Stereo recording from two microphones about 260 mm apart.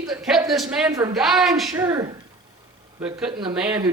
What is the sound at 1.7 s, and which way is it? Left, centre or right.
Speech, centre.